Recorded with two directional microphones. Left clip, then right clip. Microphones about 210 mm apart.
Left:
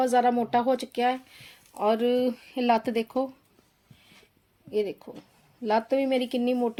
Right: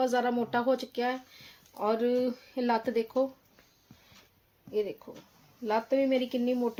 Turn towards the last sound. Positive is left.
turn(degrees=45)  # may be behind; listen again after turning